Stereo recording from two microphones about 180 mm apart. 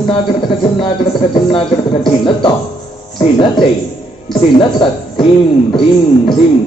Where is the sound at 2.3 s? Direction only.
25° left (ahead or behind).